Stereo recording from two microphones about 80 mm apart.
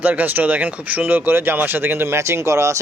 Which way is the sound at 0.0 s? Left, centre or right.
Right.